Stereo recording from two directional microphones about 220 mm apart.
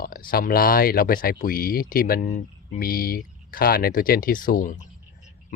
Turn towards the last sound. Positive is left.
turn(degrees=35)  # may be behind; listen again after turning